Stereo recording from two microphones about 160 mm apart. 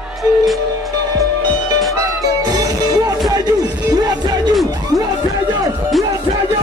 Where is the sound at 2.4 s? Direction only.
25° right (ahead or behind).